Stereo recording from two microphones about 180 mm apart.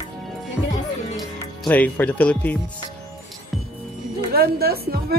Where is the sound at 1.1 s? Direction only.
5° left (ahead or behind).